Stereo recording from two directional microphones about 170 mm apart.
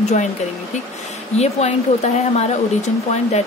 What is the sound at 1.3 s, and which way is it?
Speech, 40° left (ahead or behind).